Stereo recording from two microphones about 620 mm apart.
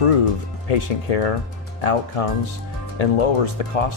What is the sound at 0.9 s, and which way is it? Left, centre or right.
Speech, left.